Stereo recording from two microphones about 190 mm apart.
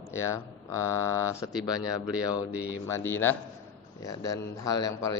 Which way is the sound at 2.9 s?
15° left (ahead or behind).